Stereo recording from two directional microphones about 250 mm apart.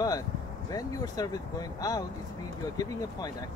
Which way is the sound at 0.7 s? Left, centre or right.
Centre.